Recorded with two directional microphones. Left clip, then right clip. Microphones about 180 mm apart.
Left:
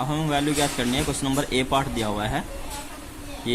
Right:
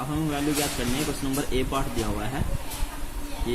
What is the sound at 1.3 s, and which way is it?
Speech, 60° left (ahead or behind).